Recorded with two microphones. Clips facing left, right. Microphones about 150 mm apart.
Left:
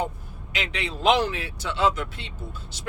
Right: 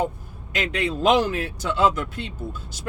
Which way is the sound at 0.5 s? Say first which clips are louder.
Right 6 dB; 45° right (ahead or behind).